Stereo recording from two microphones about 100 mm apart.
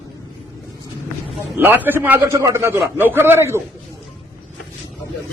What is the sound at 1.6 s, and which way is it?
A man's voice, 20° right (ahead or behind).